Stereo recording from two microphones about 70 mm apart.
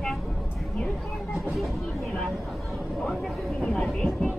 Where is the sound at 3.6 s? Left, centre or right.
Centre.